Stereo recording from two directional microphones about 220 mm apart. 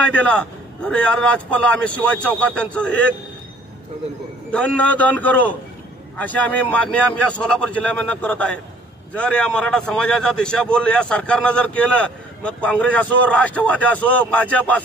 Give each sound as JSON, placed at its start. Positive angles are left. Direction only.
{"t": 0.0, "sound": "a man's voice", "side_deg": 5}
{"t": 4.5, "sound": "a man's voice", "side_deg": 5}